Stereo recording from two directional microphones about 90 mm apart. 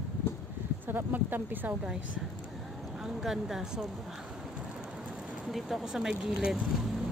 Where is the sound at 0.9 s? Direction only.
20° right (ahead or behind).